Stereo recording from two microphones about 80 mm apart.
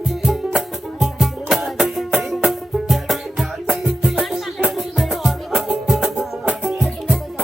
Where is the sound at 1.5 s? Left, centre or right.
Centre.